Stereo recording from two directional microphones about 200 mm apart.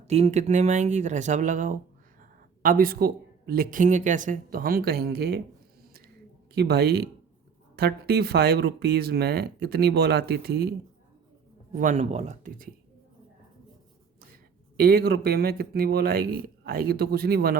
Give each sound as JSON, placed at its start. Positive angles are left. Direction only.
{"t": 0.1, "sound": "speech", "side_deg": -35}
{"t": 6.5, "sound": "speech", "side_deg": -55}
{"t": 11.8, "sound": "speech", "side_deg": -35}
{"t": 14.8, "sound": "speech", "side_deg": -50}